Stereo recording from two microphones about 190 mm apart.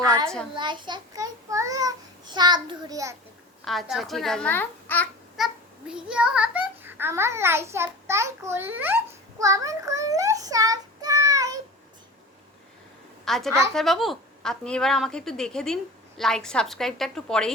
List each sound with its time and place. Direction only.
0.0 s a sound: 15° right (ahead or behind)
0.5 s a child's voice: 25° right (ahead or behind)
3.6 s a woman's voice: centre (ahead or behind)
5.4 s a child's voice: centre (ahead or behind)
9.4 s child singing: 15° right (ahead or behind)
13.2 s a woman's voice: centre (ahead or behind)